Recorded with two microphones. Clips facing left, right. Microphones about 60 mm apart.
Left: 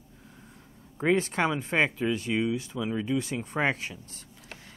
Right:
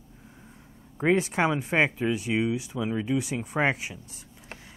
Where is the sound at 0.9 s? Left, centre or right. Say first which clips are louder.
Right 2 dB; centre.